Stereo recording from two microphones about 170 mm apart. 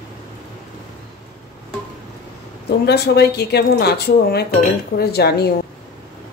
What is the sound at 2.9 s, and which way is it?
A woman's voice, 75° left (ahead or behind).